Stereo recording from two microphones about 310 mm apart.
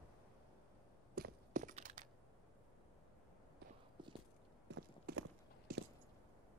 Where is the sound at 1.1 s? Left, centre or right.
Right.